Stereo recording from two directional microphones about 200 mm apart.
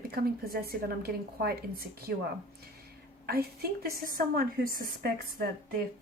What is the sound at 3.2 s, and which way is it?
A woman's voice, 50° right (ahead or behind).